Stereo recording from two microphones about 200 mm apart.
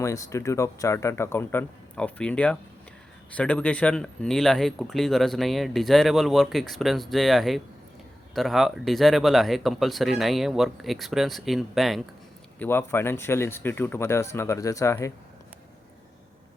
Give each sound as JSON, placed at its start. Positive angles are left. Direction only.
{"t": 0.0, "sound": "speech", "side_deg": 15}
{"t": 12.5, "sound": "speech", "side_deg": 10}